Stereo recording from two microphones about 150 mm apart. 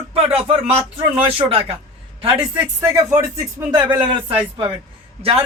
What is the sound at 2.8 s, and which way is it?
Speech, 20° right (ahead or behind).